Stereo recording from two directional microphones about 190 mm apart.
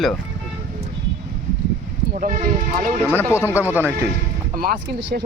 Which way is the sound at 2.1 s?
40° right (ahead or behind).